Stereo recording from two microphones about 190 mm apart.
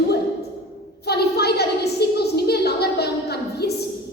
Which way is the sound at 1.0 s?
60° left (ahead or behind).